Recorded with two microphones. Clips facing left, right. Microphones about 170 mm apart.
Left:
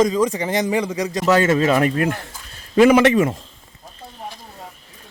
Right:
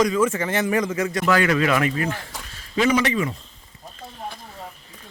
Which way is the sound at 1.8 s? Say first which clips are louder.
Left 5 dB; 45° left (ahead or behind).